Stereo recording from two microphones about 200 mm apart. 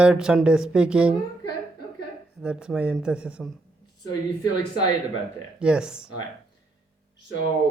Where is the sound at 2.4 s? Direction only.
5° right (ahead or behind).